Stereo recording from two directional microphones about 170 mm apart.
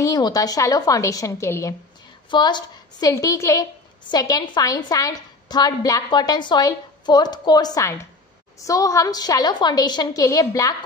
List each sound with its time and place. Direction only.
0.0 s a woman's voice: 20° left (ahead or behind)